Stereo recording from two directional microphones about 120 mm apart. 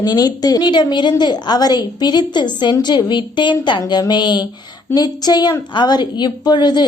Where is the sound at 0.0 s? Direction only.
35° left (ahead or behind).